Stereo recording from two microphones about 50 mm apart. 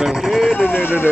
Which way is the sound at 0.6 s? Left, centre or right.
Left.